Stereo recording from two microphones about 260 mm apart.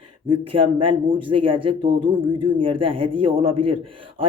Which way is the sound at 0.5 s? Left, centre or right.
Right.